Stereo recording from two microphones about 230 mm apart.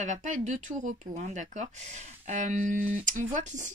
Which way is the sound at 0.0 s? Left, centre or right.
Right.